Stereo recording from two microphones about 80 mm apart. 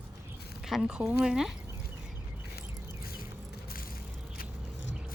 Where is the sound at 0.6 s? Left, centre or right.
Centre.